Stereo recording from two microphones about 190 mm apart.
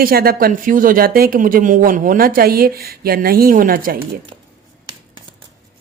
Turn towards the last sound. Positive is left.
turn(degrees=-50)  # may be behind; listen again after turning